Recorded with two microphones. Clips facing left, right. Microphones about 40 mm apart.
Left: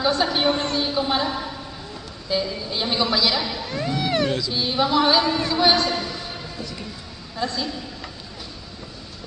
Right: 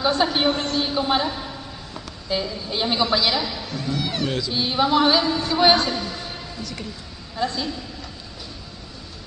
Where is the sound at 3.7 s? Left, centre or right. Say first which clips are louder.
Left 2 dB; left.